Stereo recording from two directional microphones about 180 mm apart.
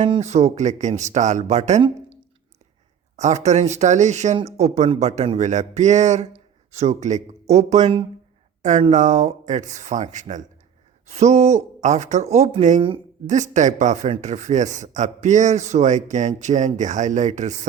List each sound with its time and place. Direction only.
0.0 s speech: 35° right (ahead or behind)
3.2 s speech: 40° right (ahead or behind)